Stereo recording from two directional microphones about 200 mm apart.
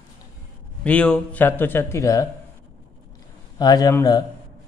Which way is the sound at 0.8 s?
5° left (ahead or behind).